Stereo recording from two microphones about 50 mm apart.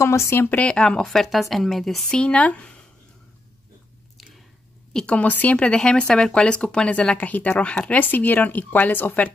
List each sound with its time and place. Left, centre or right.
0.0 s speech: left
0.6 s speech: centre
1.0 s speech: centre
2.0 s speech: left
5.0 s speech: left
5.6 s speech: left